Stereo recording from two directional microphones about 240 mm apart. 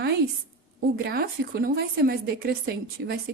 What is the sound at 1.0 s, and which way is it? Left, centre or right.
Speech, right.